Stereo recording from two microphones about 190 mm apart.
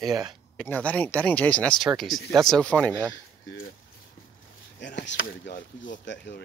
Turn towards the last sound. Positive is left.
turn(degrees=70)  # may be behind; listen again after turning